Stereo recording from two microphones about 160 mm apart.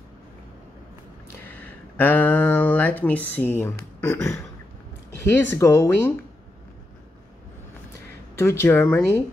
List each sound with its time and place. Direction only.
1.4 s a sound: 10° left (ahead or behind)
4.0 s speech: 15° left (ahead or behind)
5.6 s speech: 20° left (ahead or behind)
8.4 s speech: 15° left (ahead or behind)